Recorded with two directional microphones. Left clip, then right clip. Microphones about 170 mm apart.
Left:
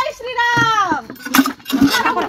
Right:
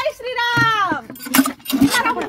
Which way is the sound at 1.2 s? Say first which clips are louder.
Left 2 dB; 50° right (ahead or behind).